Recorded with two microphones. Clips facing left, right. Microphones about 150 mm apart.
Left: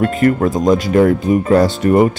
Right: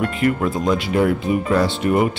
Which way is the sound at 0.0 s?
45° left (ahead or behind).